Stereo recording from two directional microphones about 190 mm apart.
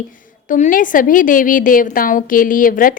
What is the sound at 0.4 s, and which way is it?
A woman's voice, 40° left (ahead or behind).